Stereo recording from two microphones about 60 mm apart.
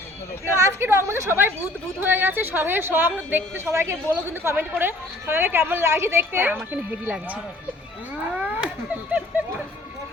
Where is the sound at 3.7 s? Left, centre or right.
Right.